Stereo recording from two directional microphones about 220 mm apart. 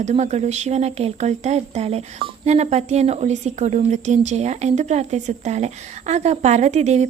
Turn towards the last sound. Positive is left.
turn(degrees=-30)  # may be behind; listen again after turning